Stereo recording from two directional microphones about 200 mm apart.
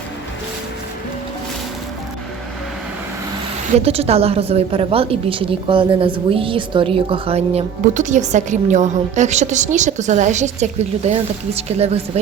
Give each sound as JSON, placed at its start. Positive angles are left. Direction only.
{"t": 3.8, "sound": "a woman's voice", "side_deg": -30}